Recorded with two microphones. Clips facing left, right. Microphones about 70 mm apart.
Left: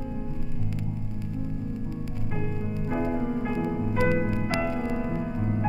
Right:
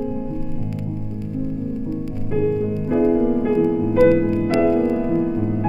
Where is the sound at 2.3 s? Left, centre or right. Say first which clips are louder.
Right 14 dB; centre.